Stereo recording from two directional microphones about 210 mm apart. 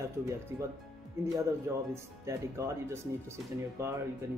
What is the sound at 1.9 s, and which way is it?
A man's voice, 15° right (ahead or behind).